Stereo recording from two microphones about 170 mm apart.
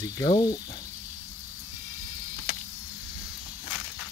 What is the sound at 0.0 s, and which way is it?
Speech, 20° left (ahead or behind).